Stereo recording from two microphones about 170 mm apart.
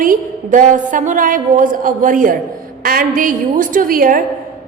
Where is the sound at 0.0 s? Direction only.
50° right (ahead or behind).